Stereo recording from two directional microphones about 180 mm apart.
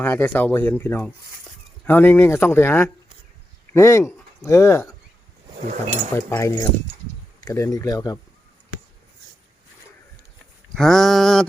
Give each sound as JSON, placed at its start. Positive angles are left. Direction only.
{"t": 0.0, "sound": "speech", "side_deg": 10}
{"t": 6.1, "sound": "speech", "side_deg": 15}
{"t": 10.8, "sound": "a sound", "side_deg": 0}